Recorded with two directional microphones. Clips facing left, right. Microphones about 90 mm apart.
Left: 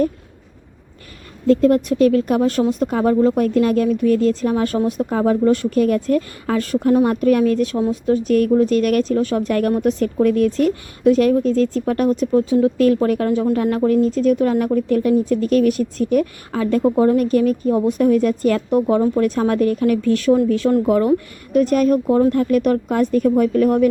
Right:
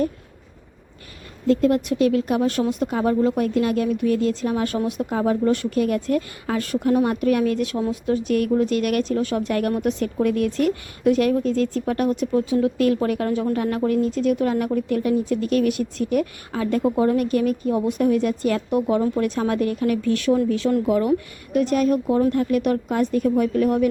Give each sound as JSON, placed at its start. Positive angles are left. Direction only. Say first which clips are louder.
{"t": 1.5, "sound": "speech", "louder": "left 4 dB", "side_deg": 40}
{"t": 16.8, "sound": "speech", "louder": "left 5 dB", "side_deg": 25}